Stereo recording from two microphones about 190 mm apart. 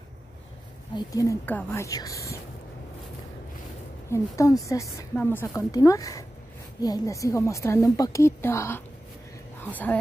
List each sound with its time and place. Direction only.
0.9 s a woman's voice: 15° left (ahead or behind)
4.1 s a woman's voice: 15° left (ahead or behind)